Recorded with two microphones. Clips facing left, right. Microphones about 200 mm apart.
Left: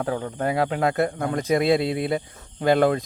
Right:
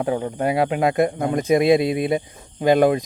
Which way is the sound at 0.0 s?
20° right (ahead or behind).